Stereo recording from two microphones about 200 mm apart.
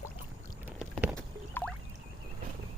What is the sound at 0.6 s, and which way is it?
Boat, 5° right (ahead or behind).